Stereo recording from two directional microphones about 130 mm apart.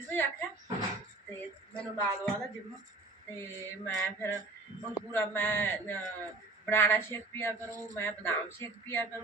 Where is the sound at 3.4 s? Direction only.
20° left (ahead or behind).